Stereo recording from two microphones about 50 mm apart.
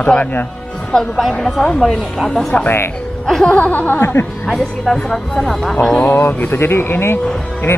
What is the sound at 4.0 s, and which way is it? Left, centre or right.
Speech, left.